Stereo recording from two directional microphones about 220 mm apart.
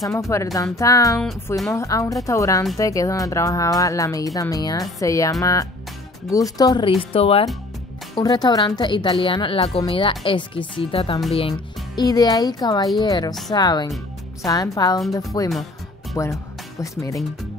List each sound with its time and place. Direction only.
0.3 s a woman's voice: 15° left (ahead or behind)